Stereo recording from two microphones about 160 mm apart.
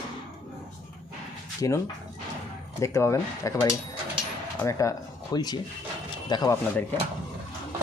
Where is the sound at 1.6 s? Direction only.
20° left (ahead or behind).